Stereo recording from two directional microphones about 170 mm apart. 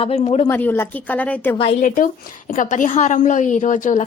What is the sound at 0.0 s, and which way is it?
Speech, 35° left (ahead or behind).